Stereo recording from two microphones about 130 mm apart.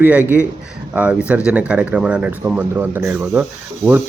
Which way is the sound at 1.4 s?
10° right (ahead or behind).